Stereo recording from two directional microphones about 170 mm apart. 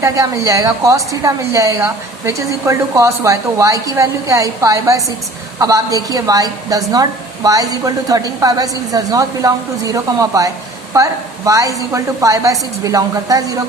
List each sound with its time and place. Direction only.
0.0 s a woman's voice: 15° right (ahead or behind)